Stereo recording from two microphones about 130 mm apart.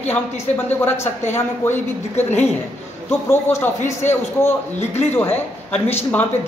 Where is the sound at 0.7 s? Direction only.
15° left (ahead or behind).